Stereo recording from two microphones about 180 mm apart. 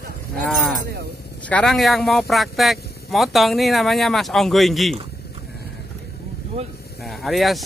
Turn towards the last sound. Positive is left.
turn(degrees=0)  # may be behind; listen again after turning